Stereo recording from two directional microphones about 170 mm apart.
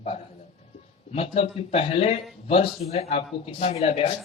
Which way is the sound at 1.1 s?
35° left (ahead or behind).